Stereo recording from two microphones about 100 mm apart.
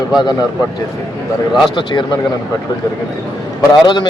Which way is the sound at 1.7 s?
50° left (ahead or behind).